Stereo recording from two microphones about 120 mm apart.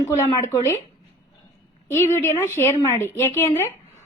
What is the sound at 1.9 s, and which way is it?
A woman's voice, 20° left (ahead or behind).